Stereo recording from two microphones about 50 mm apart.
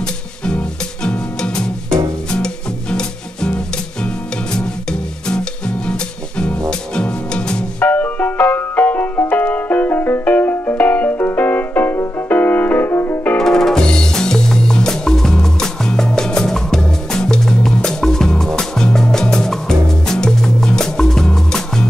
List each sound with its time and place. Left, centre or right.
0.0 s music: centre
7.8 s ice cream truck: left
9.3 s music: left
13.4 s music: centre